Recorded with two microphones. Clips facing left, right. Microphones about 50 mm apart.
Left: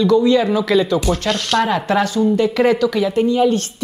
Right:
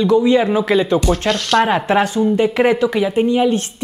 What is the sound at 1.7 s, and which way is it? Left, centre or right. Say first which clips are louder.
Speech: right 2 dB; right.